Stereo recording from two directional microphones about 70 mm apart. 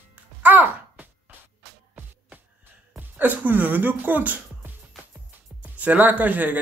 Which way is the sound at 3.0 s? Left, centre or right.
Right.